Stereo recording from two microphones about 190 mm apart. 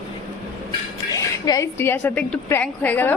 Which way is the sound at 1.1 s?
20° left (ahead or behind).